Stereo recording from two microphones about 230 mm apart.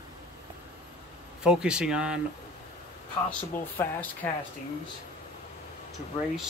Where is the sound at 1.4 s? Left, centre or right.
Centre.